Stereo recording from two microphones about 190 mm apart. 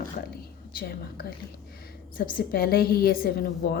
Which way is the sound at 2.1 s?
50° left (ahead or behind).